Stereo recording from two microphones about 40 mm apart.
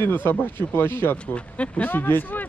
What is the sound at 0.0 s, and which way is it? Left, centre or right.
Speech, left.